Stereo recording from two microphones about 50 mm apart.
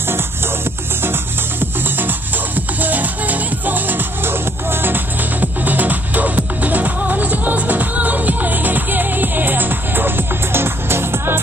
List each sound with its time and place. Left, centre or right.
1.0 s music: right
5.4 s music: right